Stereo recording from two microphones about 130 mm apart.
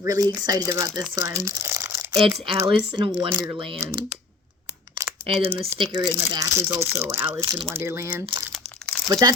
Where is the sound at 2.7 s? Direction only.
40° right (ahead or behind).